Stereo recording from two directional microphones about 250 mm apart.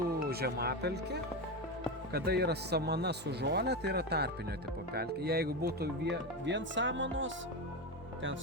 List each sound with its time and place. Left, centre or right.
0.3 s speech: right